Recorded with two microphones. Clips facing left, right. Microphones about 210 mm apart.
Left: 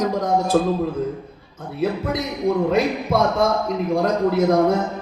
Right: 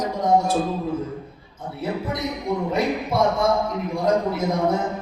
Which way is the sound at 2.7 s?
85° left.